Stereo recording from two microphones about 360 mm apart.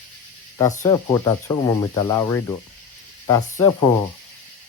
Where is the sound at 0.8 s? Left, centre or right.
Centre.